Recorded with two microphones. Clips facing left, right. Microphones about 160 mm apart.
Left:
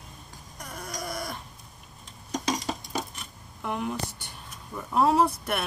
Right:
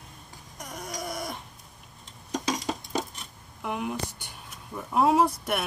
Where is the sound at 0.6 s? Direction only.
20° right (ahead or behind).